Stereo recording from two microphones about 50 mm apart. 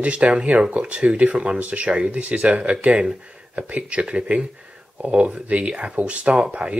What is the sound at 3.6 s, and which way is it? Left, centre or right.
Speech, right.